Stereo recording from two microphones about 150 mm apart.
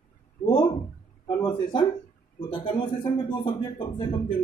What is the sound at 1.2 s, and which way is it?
Speech, 30° left (ahead or behind).